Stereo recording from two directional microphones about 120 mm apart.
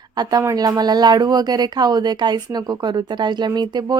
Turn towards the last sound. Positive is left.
turn(degrees=-35)  # may be behind; listen again after turning